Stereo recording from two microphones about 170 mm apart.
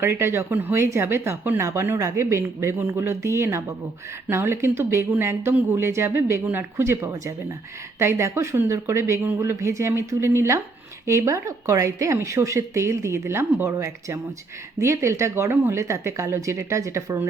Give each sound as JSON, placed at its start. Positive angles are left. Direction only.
{"t": 0.0, "sound": "speech", "side_deg": -15}